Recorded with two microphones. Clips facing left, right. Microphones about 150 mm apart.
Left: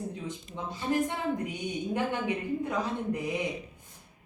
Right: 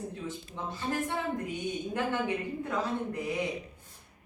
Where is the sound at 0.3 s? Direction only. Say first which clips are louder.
Even; 15° left (ahead or behind).